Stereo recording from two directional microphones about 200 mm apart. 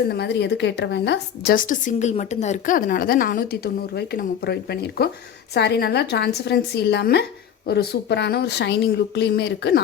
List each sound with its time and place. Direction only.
0.1 s a woman's voice: 55° left (ahead or behind)